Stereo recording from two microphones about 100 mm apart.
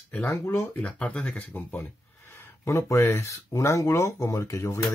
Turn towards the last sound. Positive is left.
turn(degrees=30)  # may be behind; listen again after turning